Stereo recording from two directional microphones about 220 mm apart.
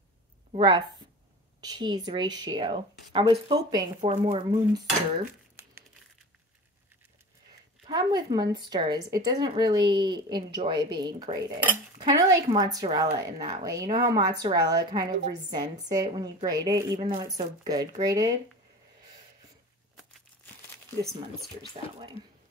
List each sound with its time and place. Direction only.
0.5 s a woman's voice: 20° right (ahead or behind)
7.8 s a woman's voice: 20° right (ahead or behind)